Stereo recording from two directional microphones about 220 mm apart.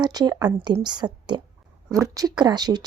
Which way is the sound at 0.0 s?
20° right (ahead or behind).